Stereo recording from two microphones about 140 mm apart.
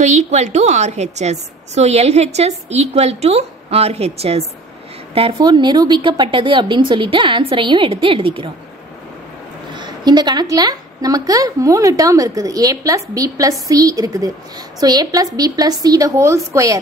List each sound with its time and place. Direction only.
0.0 s a woman's voice: 55° right (ahead or behind)
5.4 s a woman's voice: 30° right (ahead or behind)
9.8 s a sound: 30° right (ahead or behind)
10.5 s a woman's voice: 25° right (ahead or behind)